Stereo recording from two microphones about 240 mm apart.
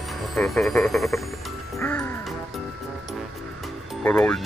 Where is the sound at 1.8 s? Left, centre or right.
Centre.